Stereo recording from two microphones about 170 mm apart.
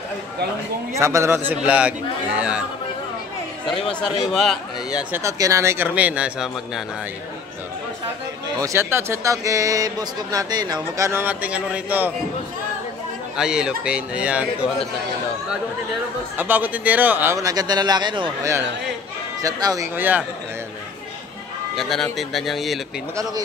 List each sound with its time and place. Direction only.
0.9 s speech: 15° right (ahead or behind)
3.8 s a man's voice: 5° left (ahead or behind)
5.1 s speech: 20° right (ahead or behind)
8.5 s a man's voice: 15° right (ahead or behind)
13.4 s a man's voice: 5° right (ahead or behind)
16.3 s speech: 10° right (ahead or behind)
21.7 s a man's voice: centre (ahead or behind)